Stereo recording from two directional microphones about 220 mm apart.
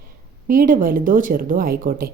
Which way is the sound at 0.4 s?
40° right (ahead or behind).